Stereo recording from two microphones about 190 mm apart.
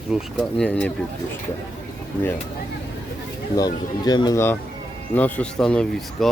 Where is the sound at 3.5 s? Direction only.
20° left (ahead or behind).